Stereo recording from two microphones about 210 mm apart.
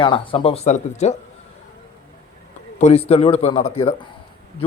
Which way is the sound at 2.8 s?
30° left (ahead or behind).